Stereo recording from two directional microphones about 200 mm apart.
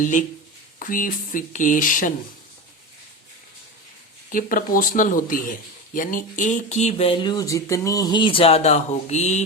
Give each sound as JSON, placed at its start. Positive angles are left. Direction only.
{"t": 0.0, "sound": "speech", "side_deg": 40}
{"t": 4.3, "sound": "speech", "side_deg": 45}